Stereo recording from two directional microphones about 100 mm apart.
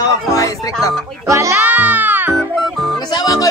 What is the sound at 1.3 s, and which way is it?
Music, 30° right (ahead or behind).